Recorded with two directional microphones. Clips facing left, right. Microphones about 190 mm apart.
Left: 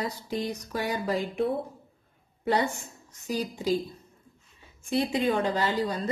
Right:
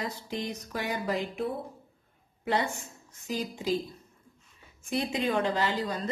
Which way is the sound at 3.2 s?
40° left (ahead or behind).